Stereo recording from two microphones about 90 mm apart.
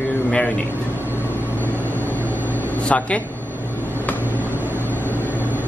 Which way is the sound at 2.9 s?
10° left (ahead or behind).